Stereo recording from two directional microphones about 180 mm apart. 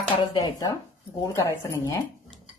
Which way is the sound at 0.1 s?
25° left (ahead or behind).